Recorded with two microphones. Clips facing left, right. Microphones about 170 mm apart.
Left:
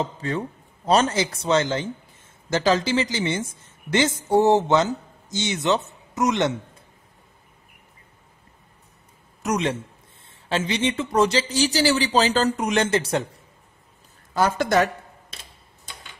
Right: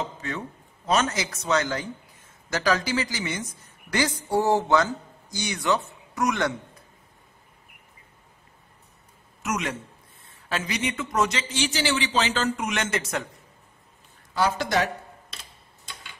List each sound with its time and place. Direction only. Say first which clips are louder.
0.0 s a man's voice: left 5 dB; 30° left (ahead or behind)
9.4 s a man's voice: left 5 dB; 30° left (ahead or behind)
14.3 s speech: left 4 dB; 50° left (ahead or behind)